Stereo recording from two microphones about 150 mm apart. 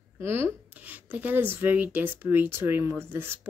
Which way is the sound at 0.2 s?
15° right (ahead or behind).